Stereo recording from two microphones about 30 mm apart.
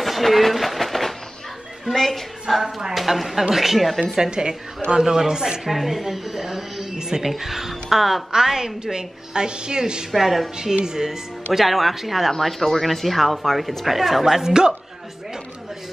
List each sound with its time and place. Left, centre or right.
0.0 s a sound: centre
2.0 s a woman's voice: centre
2.6 s a woman's voice: centre
3.0 s speech: centre
4.2 s a woman's voice: right
5.7 s a woman's voice: centre; by 7.2 s right
7.2 s a woman's voice: centre
8.3 s a woman's voice: centre
10.1 s speech: centre
10.6 s a woman's voice: centre
11.5 s speech: centre
12.3 s speech: centre
14.2 s a woman's voice: centre